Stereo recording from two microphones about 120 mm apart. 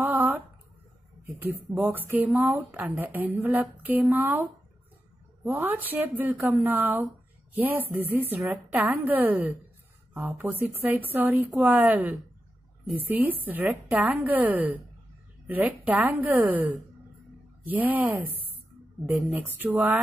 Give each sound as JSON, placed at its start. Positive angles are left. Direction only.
{"t": 0.0, "sound": "a sound", "side_deg": -15}
{"t": 1.2, "sound": "speech", "side_deg": -15}
{"t": 13.2, "sound": "speech", "side_deg": -15}
{"t": 17.6, "sound": "speech", "side_deg": -15}